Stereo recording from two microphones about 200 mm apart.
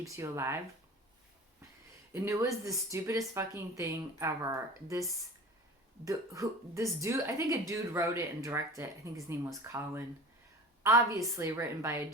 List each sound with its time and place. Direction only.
0.0 s speech: 15° right (ahead or behind)
2.1 s speech: 15° right (ahead or behind)
6.1 s speech: 15° right (ahead or behind)